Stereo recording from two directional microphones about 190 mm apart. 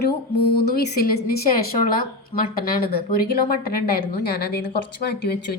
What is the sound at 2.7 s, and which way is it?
A woman's voice, 55° left (ahead or behind).